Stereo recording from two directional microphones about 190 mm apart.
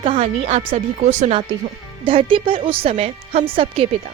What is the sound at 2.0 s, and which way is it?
A woman's voice, 25° right (ahead or behind).